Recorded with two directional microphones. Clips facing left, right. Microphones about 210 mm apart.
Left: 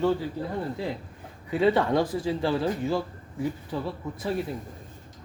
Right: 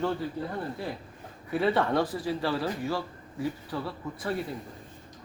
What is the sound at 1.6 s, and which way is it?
A man's voice, 15° left (ahead or behind).